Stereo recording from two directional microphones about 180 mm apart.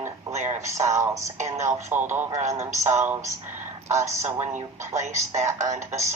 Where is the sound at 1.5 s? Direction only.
15° right (ahead or behind).